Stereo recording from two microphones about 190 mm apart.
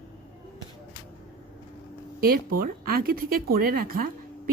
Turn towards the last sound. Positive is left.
turn(degrees=-45)  # may be behind; listen again after turning